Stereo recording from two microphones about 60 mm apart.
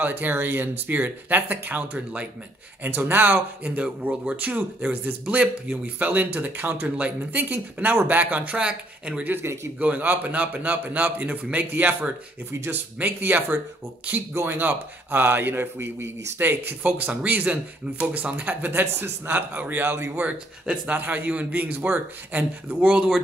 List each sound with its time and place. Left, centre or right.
0.0 s speech: right; by 9.2 s centre
9.2 s a man's voice: right
20.2 s speech: right